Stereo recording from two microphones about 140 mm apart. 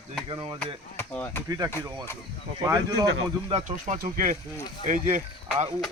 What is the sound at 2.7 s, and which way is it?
Speech, 25° right (ahead or behind).